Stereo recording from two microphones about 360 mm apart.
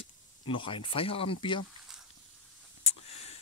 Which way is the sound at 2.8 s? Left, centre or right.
Centre.